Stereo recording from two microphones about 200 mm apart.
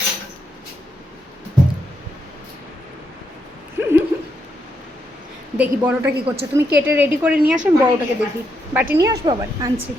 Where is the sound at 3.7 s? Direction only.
10° right (ahead or behind).